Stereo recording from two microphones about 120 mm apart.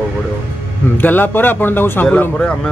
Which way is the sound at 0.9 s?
15° left (ahead or behind).